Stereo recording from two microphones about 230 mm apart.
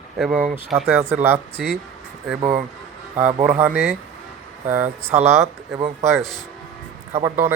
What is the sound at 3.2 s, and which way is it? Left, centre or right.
Speech, right.